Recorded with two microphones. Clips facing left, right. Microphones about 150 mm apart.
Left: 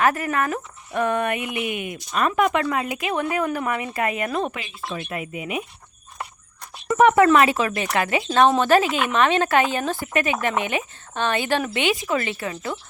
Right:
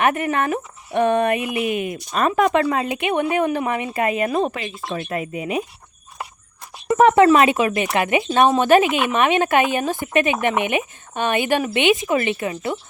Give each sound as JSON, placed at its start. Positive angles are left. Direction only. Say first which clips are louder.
{"t": 0.0, "sound": "speech", "louder": "right 2 dB", "side_deg": -25}
{"t": 4.5, "sound": "speech", "louder": "right 4 dB", "side_deg": -40}
{"t": 6.9, "sound": "speech", "louder": "right 2 dB", "side_deg": -35}
{"t": 7.3, "sound": "speech", "louder": "right 2 dB", "side_deg": -20}